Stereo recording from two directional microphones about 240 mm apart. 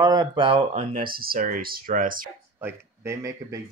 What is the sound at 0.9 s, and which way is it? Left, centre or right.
Speech, right.